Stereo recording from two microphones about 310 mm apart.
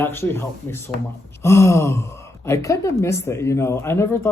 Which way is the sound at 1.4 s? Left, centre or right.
Centre.